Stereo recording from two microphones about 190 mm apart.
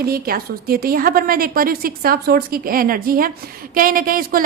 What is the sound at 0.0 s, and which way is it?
A woman's voice, 50° right (ahead or behind).